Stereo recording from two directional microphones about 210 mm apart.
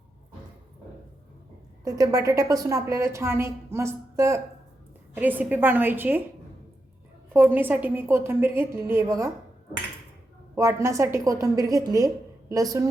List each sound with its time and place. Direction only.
1.8 s a woman's voice: 15° right (ahead or behind)
7.3 s a woman's voice: 10° right (ahead or behind)
10.5 s a woman's voice: 15° right (ahead or behind)